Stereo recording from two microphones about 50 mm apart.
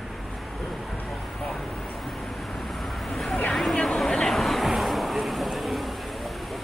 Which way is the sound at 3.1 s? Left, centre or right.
Centre.